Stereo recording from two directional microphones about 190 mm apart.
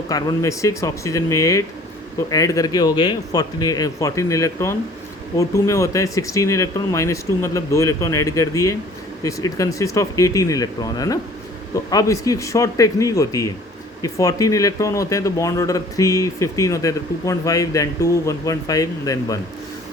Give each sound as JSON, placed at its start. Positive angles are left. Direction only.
{"t": 0.1, "sound": "speech", "side_deg": 20}